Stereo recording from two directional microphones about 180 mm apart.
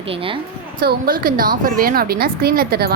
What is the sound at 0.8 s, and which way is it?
A woman's voice, 55° right (ahead or behind).